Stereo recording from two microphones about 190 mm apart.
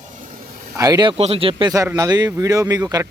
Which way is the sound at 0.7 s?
20° right (ahead or behind).